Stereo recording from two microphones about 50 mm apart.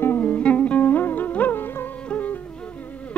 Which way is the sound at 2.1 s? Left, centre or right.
Left.